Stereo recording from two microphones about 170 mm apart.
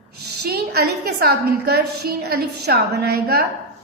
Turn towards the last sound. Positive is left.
turn(degrees=-70)  # may be behind; listen again after turning